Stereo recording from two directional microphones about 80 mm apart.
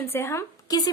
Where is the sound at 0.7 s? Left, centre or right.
Left.